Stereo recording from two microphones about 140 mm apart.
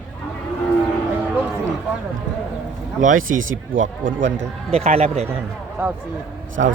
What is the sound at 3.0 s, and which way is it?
Speech, 65° right (ahead or behind).